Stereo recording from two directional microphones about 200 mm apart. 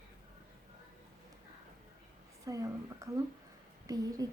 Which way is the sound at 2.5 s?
15° right (ahead or behind).